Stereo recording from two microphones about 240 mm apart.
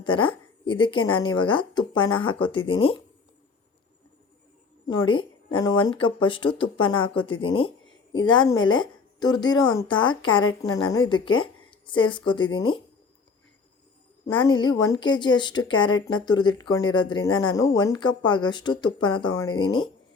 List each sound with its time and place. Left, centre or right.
0.0 s a woman's voice: left
4.9 s a woman's voice: centre
14.3 s a woman's voice: centre